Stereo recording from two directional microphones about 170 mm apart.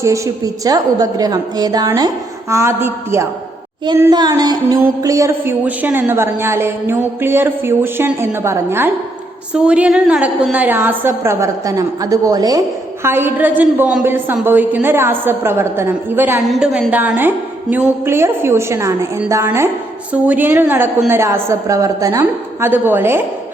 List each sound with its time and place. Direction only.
0.0 s a woman's voice: 20° right (ahead or behind)